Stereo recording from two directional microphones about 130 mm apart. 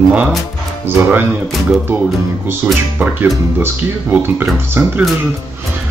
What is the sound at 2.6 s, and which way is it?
Speech, 15° right (ahead or behind).